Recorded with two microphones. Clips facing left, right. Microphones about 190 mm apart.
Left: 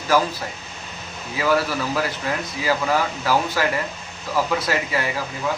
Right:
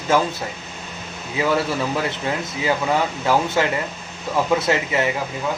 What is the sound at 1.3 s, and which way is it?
Speech, 25° right (ahead or behind).